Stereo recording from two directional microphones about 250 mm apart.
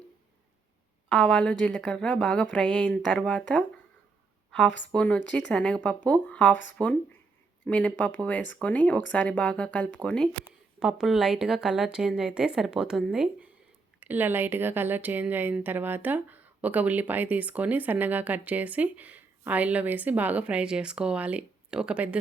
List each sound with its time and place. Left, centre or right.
1.1 s speech: centre
4.9 s speech: centre